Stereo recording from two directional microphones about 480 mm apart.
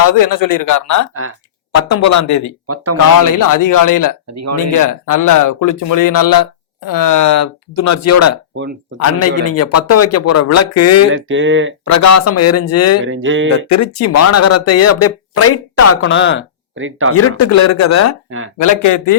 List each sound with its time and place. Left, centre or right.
0.0 s speech: left
2.6 s speech: right
3.4 s speech: left
8.5 s speech: right
9.7 s speech: left
11.1 s speech: right
11.9 s speech: left
13.1 s speech: right
13.7 s speech: left
16.7 s speech: right
17.2 s speech: left
18.3 s speech: right
18.5 s speech: left